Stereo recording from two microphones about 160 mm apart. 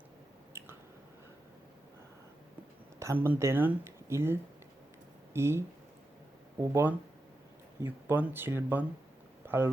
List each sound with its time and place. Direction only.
0.5 s squish: 15° right (ahead or behind)
3.0 s speech: 15° right (ahead or behind)